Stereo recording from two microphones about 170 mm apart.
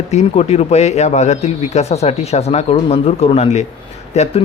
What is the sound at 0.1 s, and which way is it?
Speech, 40° left (ahead or behind).